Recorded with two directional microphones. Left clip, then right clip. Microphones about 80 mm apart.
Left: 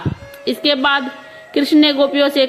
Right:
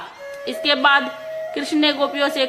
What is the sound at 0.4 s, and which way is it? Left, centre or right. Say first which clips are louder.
A woman's voice: left 1 dB; left.